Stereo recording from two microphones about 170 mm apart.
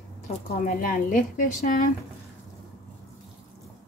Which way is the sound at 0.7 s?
55° left (ahead or behind).